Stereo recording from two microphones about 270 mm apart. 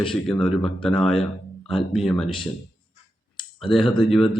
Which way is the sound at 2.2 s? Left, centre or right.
Centre.